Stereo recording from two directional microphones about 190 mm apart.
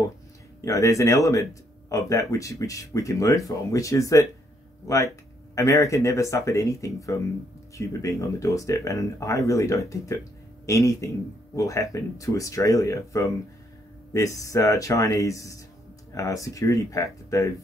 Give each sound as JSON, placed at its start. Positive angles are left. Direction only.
{"t": 0.7, "sound": "speech", "side_deg": 15}